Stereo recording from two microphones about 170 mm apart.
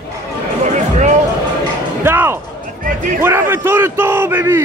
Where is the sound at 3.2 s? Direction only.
15° right (ahead or behind).